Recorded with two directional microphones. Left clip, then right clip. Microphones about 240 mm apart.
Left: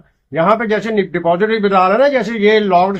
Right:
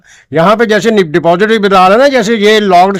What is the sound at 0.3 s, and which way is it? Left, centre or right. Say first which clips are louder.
Speech: right 6 dB; right.